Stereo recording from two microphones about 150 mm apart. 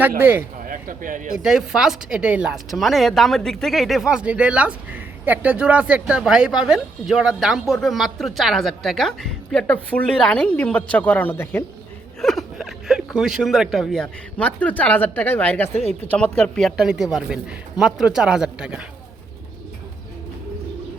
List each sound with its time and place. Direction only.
0.2 s speech: 15° right (ahead or behind)
0.6 s speech: 65° right (ahead or behind)
1.4 s speech: 5° right (ahead or behind); by 11.6 s 10° left (ahead or behind)
12.2 s speech: centre (ahead or behind)